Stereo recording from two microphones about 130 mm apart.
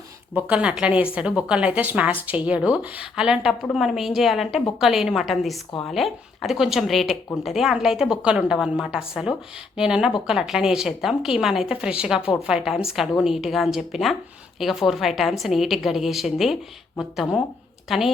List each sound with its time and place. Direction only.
0.3 s a woman's voice: 10° right (ahead or behind)